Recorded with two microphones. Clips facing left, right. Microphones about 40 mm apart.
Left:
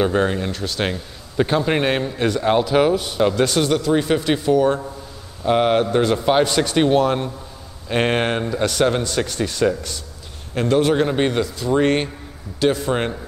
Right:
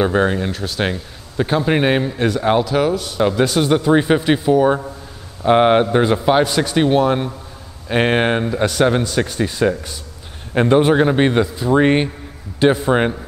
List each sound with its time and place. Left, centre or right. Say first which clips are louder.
0.0 s speech: right 2 dB; centre
2.6 s speech: left 1 dB; centre
3.2 s speech: right 3 dB; centre
3.7 s a man's voice: right 4 dB; right
5.4 s a man's voice: right 4 dB; right
5.9 s speech: right 2 dB; centre
6.2 s speech: right 2 dB; centre
10.5 s a man's voice: right 4 dB; right